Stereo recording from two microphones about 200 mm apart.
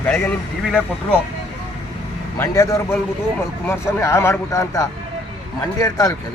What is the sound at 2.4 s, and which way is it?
Speech, 15° left (ahead or behind).